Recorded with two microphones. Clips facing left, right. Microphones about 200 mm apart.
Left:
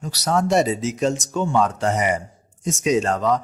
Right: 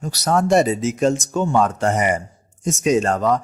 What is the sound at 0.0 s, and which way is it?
Speech, 50° right (ahead or behind).